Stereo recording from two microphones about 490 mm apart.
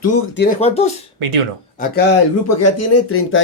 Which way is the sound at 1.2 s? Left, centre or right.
Right.